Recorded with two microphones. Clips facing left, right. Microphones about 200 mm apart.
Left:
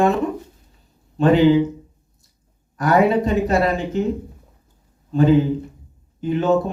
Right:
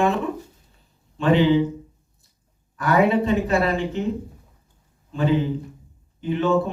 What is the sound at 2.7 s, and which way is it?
Speech, 40° left (ahead or behind).